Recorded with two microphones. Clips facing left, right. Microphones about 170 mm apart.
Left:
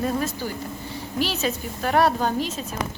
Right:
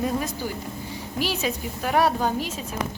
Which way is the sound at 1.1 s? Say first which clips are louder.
Left 1 dB; 10° right (ahead or behind).